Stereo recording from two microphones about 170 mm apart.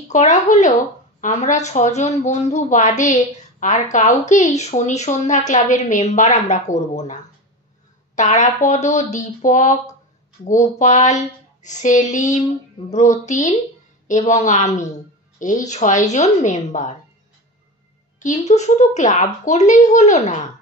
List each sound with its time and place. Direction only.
0.1 s speech: 45° left (ahead or behind)
8.2 s speech: 40° left (ahead or behind)
18.2 s speech: 45° left (ahead or behind)